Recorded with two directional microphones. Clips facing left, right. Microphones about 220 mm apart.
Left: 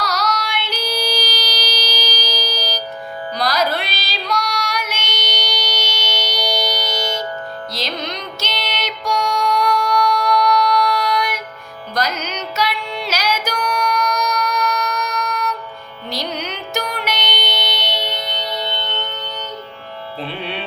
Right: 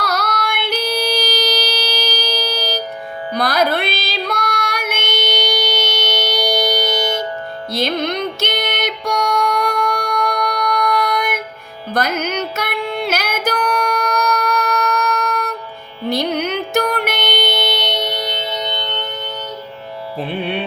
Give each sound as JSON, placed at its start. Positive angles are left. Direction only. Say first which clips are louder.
{"t": 0.0, "sound": "child singing", "louder": "right 1 dB", "side_deg": -55}
{"t": 3.3, "sound": "music", "louder": "right 3 dB", "side_deg": -55}
{"t": 18.5, "sound": "music", "louder": "right 1 dB", "side_deg": -20}
{"t": 20.1, "sound": "music", "louder": "right 5 dB", "side_deg": -50}